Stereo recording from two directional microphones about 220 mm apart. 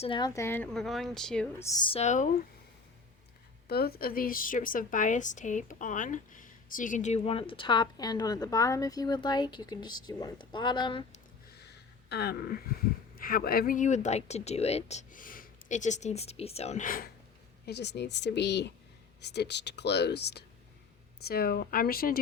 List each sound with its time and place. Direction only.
0.0 s a woman's voice: 20° left (ahead or behind); by 1.6 s 5° left (ahead or behind)
1.8 s speech: 25° left (ahead or behind)
3.7 s a woman's voice: 45° left (ahead or behind); by 11.2 s 20° left (ahead or behind)
11.5 s a sound: 50° left (ahead or behind)
13.1 s speech: 40° left (ahead or behind)
17.7 s speech: 50° left (ahead or behind)